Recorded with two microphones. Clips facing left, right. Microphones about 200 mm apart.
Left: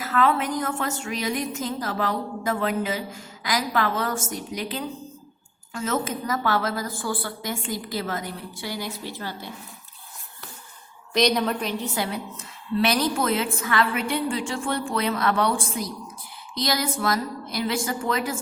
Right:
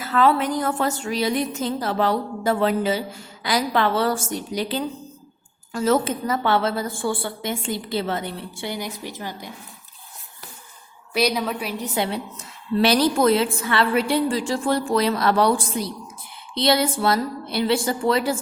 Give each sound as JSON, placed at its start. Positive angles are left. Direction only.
{"t": 0.0, "sound": "a woman's voice", "side_deg": -30}
{"t": 11.1, "sound": "a woman's voice", "side_deg": -5}
{"t": 11.9, "sound": "a woman's voice", "side_deg": -25}